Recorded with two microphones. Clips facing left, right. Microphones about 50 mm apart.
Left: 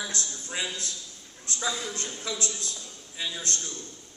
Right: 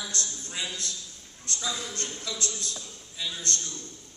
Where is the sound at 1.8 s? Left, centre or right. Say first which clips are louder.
Left 2 dB; centre.